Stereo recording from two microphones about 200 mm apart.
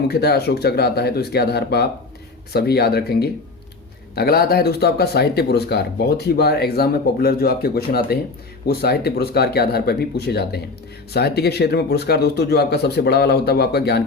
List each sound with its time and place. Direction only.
0.1 s speech: 55° left (ahead or behind)